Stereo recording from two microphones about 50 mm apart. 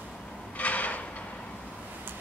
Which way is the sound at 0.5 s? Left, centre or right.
Left.